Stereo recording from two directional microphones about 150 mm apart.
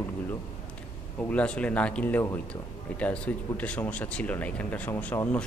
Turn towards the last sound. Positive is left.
turn(degrees=10)  # may be behind; listen again after turning